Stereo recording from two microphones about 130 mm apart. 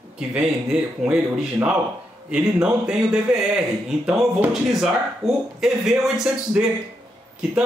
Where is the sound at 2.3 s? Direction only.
5° right (ahead or behind).